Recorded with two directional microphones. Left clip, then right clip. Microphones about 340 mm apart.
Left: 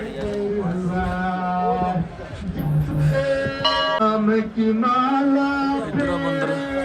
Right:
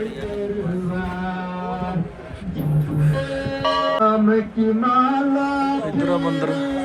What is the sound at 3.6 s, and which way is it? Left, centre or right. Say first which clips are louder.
Music: right 3 dB; right.